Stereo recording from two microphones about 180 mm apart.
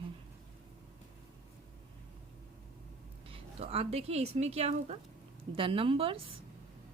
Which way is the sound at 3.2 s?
30° right (ahead or behind).